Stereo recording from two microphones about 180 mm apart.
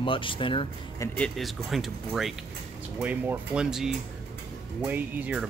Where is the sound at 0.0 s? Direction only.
30° left (ahead or behind).